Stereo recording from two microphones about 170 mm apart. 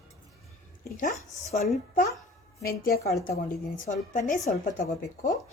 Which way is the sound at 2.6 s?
60° left (ahead or behind).